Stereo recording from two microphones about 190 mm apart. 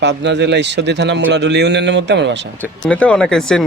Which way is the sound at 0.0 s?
65° right (ahead or behind).